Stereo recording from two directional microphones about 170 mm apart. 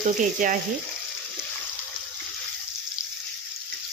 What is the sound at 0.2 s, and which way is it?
Speech, 50° right (ahead or behind).